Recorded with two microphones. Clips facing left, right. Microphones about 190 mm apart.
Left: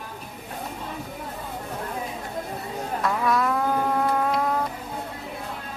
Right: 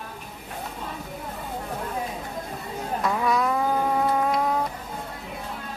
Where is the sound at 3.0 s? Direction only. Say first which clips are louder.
Even; centre (ahead or behind).